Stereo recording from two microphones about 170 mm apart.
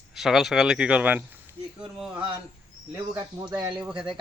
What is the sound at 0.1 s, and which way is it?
Speech, centre (ahead or behind).